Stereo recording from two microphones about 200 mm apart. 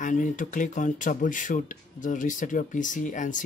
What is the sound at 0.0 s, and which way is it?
Speech, 40° left (ahead or behind).